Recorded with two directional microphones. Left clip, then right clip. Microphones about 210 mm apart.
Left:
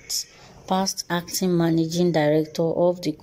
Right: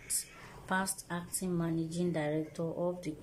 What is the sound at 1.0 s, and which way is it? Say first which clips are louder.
Speech: left 15 dB; 50° left (ahead or behind).